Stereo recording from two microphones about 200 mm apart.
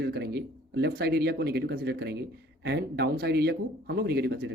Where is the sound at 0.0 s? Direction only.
55° right (ahead or behind).